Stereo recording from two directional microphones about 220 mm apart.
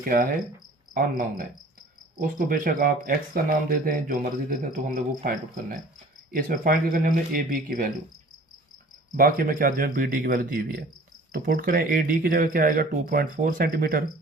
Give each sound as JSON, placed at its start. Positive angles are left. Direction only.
{"t": 0.0, "sound": "speech", "side_deg": -40}
{"t": 9.1, "sound": "speech", "side_deg": -40}